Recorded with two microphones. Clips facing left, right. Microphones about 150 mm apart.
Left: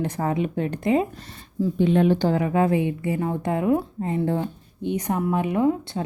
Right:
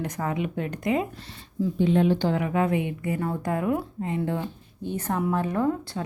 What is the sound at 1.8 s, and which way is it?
Speech, 60° left (ahead or behind).